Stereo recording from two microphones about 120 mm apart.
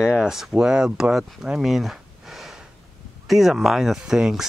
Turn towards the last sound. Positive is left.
turn(degrees=-5)  # may be behind; listen again after turning